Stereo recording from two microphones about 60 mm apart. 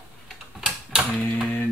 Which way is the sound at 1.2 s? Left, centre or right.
Centre.